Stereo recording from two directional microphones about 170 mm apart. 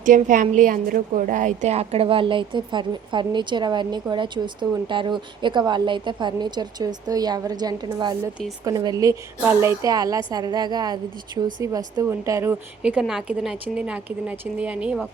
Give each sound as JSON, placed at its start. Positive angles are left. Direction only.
{"t": 0.0, "sound": "a woman's voice", "side_deg": -50}
{"t": 12.8, "sound": "a woman's voice", "side_deg": -5}